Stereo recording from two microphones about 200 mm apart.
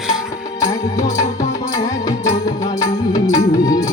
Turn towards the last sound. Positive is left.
turn(degrees=20)  # may be behind; listen again after turning